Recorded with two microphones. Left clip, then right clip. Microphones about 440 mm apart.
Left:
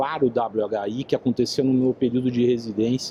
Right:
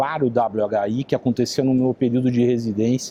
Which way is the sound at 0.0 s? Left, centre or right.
Right.